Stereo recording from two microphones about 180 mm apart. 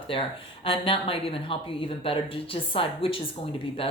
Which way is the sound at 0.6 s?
30° left (ahead or behind).